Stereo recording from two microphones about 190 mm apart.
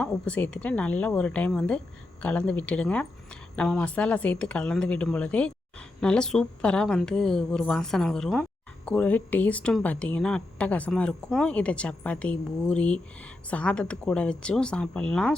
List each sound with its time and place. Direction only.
0.0 s a woman's voice: 5° left (ahead or behind)